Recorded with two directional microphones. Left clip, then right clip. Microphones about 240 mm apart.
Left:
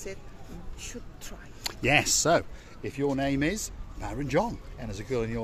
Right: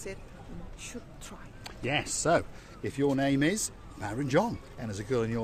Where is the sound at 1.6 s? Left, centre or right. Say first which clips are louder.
Left 8 dB; left.